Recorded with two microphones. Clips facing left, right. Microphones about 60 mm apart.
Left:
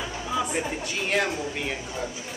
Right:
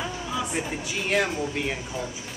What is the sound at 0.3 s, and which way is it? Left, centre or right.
Speech, centre.